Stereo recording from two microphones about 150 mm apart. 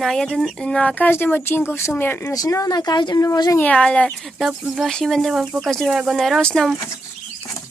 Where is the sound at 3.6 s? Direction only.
10° left (ahead or behind).